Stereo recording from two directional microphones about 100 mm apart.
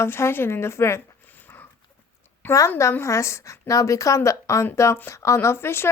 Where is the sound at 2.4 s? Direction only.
30° left (ahead or behind).